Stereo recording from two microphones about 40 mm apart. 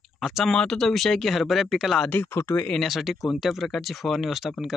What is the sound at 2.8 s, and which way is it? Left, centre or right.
Speech, centre.